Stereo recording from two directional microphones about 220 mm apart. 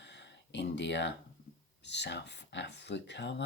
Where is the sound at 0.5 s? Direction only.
50° left (ahead or behind).